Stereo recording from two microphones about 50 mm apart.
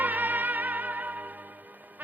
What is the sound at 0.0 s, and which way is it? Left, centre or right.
Music, right.